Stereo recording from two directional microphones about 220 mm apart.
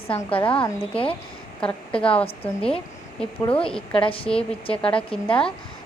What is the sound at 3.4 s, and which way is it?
Speech, 25° left (ahead or behind).